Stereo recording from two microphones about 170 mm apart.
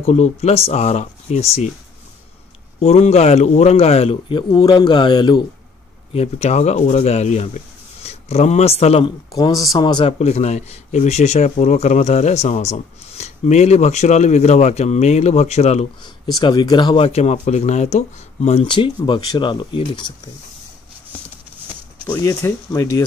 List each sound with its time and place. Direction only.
0.0 s speech: 40° left (ahead or behind)
2.8 s speech: 40° left (ahead or behind)
6.1 s speech: 40° left (ahead or behind)
9.3 s speech: 20° left (ahead or behind)
10.1 s speech: 40° left (ahead or behind)
16.0 s speech: 25° left (ahead or behind)
22.0 s speech: 15° left (ahead or behind)